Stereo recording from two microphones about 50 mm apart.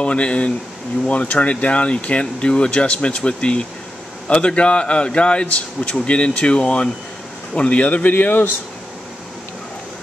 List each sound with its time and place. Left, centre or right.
0.0 s speech: left